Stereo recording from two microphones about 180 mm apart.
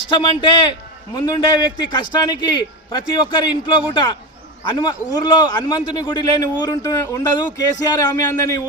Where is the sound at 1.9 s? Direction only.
25° left (ahead or behind).